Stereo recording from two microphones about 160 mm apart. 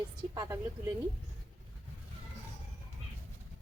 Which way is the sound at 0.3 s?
20° right (ahead or behind).